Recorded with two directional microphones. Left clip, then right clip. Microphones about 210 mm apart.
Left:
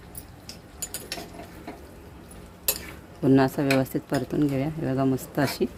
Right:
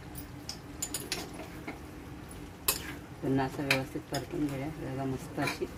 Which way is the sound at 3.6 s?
55° left (ahead or behind).